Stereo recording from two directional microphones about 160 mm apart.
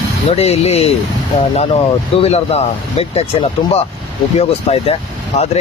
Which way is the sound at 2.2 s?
40° left (ahead or behind).